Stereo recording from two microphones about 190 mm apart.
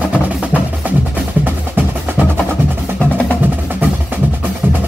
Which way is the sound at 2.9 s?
5° left (ahead or behind).